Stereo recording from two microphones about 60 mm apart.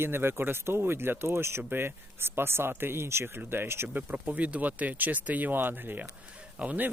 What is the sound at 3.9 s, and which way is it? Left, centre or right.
Speech, right.